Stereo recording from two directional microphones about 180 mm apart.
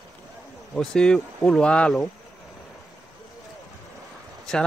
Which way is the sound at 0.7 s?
5° left (ahead or behind).